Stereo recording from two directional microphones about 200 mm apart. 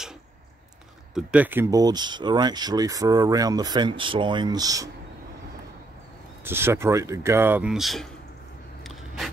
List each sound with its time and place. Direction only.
1.1 s speech: 5° right (ahead or behind)
6.4 s speech: 10° right (ahead or behind)
8.8 s vehicle: centre (ahead or behind)